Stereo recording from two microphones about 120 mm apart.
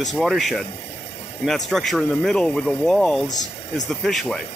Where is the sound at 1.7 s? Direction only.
5° left (ahead or behind).